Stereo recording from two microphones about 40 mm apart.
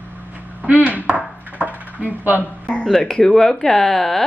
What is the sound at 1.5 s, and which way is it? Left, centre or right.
Coin, right.